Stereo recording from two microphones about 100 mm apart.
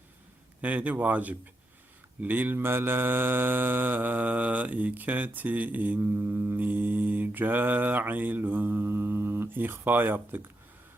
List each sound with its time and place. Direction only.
0.6 s a man's voice: 15° right (ahead or behind)
2.2 s mantra: 20° right (ahead or behind)